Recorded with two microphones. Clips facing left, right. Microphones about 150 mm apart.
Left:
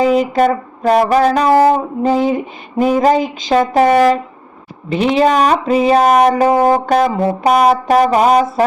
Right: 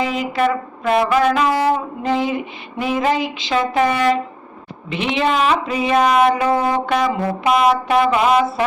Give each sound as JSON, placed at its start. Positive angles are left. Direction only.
{"t": 0.0, "sound": "music", "side_deg": 40}
{"t": 6.6, "sound": "brass instrument", "side_deg": 45}
{"t": 7.4, "sound": "music", "side_deg": 40}